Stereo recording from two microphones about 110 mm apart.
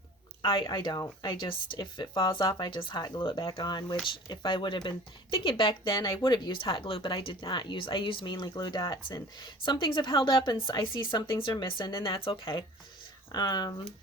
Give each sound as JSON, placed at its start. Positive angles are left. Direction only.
{"t": 0.6, "sound": "speech", "side_deg": 35}
{"t": 13.3, "sound": "speech", "side_deg": 40}